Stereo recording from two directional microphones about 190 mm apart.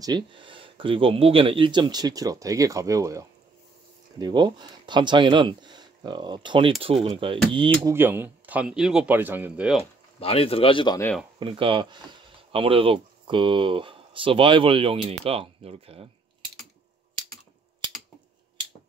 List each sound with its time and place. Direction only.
0.0 s speech: 25° right (ahead or behind)
7.8 s speech: 10° right (ahead or behind)
10.2 s speech: 30° left (ahead or behind)
11.3 s speech: 25° right (ahead or behind)